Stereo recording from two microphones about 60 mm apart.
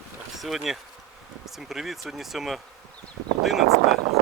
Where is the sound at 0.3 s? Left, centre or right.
Centre.